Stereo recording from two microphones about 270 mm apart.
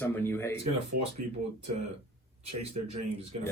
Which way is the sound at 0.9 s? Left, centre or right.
Right.